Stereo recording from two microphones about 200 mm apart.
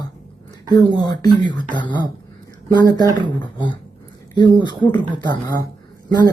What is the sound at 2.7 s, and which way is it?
A woman's voice, 20° left (ahead or behind).